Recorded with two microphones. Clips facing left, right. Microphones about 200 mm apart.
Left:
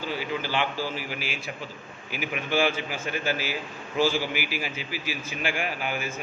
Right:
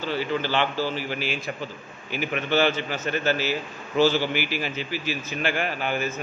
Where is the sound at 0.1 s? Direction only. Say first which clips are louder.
Right 5 dB; 5° left (ahead or behind).